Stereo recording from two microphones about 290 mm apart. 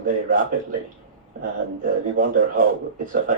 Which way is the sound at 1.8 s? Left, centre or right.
Right.